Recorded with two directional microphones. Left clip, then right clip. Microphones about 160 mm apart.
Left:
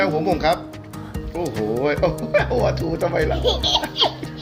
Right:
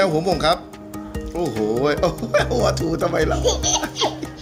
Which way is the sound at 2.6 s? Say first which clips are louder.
Right 1 dB; 40° right (ahead or behind).